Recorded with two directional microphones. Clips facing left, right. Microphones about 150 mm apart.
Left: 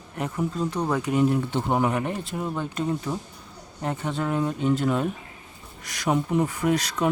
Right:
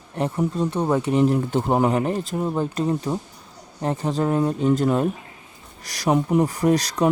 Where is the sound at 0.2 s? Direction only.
30° right (ahead or behind).